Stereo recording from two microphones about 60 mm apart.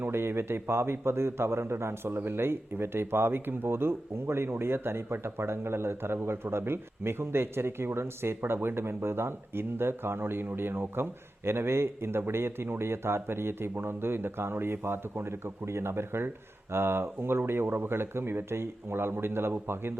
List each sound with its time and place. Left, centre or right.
0.0 s a man's voice: right